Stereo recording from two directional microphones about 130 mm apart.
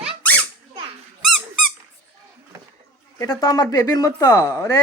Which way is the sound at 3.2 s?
25° left (ahead or behind).